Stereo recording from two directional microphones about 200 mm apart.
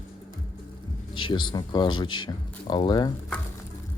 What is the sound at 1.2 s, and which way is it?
Speech, 20° left (ahead or behind).